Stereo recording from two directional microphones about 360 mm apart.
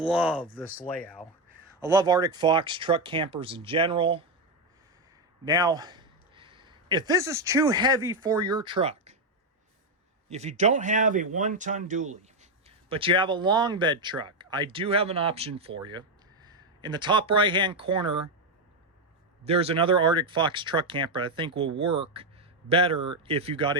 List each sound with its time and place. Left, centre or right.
0.0 s speech: centre
1.9 s speech: centre
5.5 s speech: centre
10.2 s a man's voice: centre
19.5 s speech: centre